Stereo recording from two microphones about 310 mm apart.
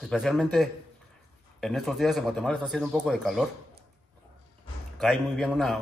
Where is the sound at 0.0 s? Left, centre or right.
Centre.